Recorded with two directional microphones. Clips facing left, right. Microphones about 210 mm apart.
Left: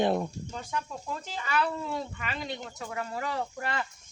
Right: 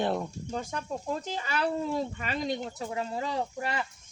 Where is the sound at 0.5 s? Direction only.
40° right (ahead or behind); by 3.8 s 15° right (ahead or behind).